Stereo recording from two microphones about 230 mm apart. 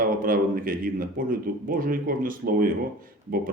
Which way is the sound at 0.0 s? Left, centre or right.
Right.